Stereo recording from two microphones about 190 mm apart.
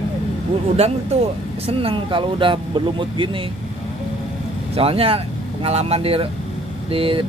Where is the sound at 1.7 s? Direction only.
30° right (ahead or behind).